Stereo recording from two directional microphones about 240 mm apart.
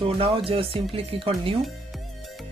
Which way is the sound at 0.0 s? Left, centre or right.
Right.